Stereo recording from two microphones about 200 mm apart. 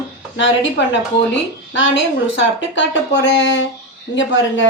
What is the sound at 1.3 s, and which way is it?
Speech, 65° left (ahead or behind).